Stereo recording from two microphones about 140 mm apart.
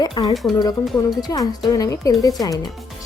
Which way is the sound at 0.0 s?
30° left (ahead or behind).